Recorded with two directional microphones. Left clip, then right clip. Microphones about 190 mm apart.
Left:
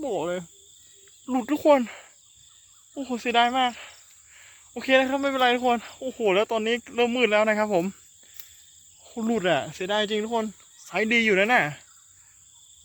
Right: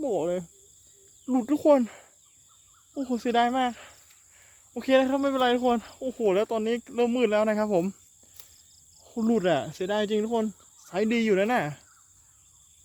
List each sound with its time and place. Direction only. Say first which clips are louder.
0.0 s cricket: right 1 dB; 15° right (ahead or behind)
1.3 s fowl: left 1 dB; 10° right (ahead or behind)
4.4 s speech: left 2 dB; 10° right (ahead or behind)
9.0 s fowl: even; 10° right (ahead or behind)